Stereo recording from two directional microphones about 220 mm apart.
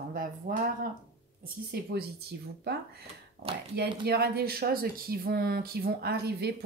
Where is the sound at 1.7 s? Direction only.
45° right (ahead or behind).